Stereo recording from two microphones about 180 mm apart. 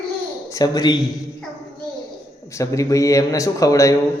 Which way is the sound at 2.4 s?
15° left (ahead or behind).